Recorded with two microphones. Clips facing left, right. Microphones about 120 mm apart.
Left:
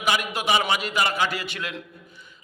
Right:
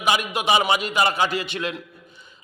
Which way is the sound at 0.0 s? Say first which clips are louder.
Right 2 dB; 20° right (ahead or behind).